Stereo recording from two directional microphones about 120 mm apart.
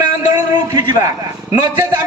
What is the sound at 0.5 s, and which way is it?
Speech, 35° right (ahead or behind).